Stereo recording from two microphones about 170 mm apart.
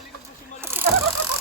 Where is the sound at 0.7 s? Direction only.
15° right (ahead or behind).